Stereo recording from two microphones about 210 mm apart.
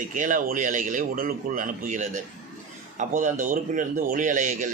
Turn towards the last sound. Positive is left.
turn(degrees=-35)  # may be behind; listen again after turning